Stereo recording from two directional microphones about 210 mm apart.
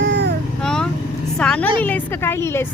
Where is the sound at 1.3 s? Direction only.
5° left (ahead or behind).